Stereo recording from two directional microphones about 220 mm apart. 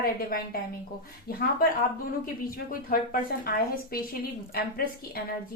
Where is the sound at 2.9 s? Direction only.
40° left (ahead or behind).